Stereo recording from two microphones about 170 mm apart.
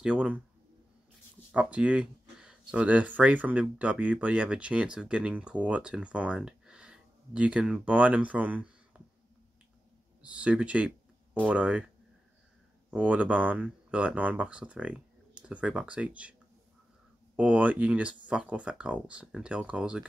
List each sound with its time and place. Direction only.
0.0 s speech: 5° right (ahead or behind)
1.5 s a sound: 5° right (ahead or behind)
2.7 s speech: 5° right (ahead or behind)
10.2 s speech: 5° right (ahead or behind)
12.9 s speech: 10° right (ahead or behind)
17.4 s speech: 10° right (ahead or behind)